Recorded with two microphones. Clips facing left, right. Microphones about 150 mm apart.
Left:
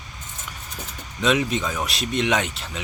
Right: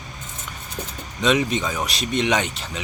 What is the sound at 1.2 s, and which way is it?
Speech, centre (ahead or behind).